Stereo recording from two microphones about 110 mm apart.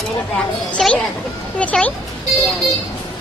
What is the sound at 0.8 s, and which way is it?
A child's voice, centre (ahead or behind).